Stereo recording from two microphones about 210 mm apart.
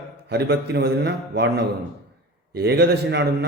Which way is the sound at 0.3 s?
50° right (ahead or behind).